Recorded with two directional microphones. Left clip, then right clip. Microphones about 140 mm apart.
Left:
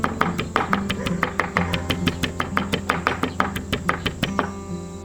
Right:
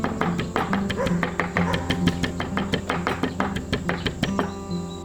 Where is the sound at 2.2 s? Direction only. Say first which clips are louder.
Left 3 dB; 15° right (ahead or behind).